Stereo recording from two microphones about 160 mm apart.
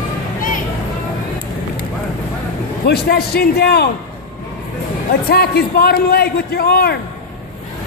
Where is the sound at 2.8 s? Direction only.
80° left.